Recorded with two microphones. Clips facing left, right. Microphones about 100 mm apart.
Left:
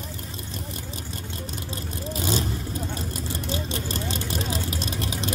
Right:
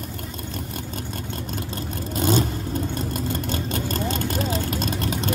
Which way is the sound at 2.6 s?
50° right (ahead or behind).